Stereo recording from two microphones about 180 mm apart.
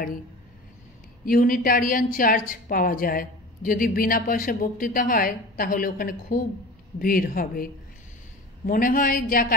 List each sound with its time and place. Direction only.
1.2 s a woman's voice: 50° left (ahead or behind)